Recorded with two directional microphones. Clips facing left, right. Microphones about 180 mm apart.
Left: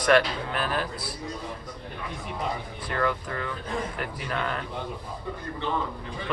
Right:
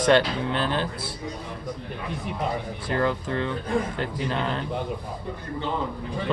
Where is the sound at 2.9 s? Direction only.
30° right (ahead or behind).